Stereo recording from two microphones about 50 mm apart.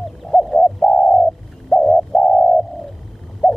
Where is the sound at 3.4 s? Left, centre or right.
Centre.